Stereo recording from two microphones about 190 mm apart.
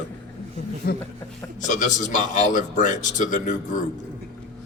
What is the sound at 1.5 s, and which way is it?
A man's voice, 40° left (ahead or behind).